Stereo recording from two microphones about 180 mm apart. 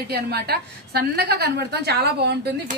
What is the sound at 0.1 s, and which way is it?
A woman's voice, 60° right (ahead or behind).